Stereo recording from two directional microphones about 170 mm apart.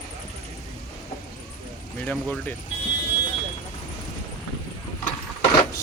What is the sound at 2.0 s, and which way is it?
Speech, 10° left (ahead or behind).